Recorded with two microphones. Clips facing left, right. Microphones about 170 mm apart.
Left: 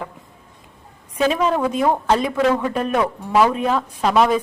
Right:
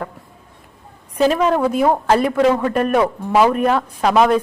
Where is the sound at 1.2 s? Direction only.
5° right (ahead or behind).